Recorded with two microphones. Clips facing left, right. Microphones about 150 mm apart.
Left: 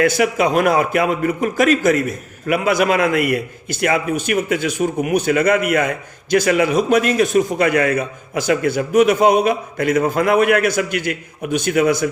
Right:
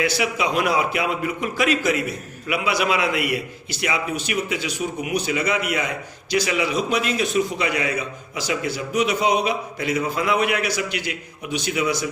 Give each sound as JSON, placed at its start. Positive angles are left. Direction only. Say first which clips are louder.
{"t": 0.0, "sound": "a man's voice", "louder": "left 7 dB", "side_deg": 50}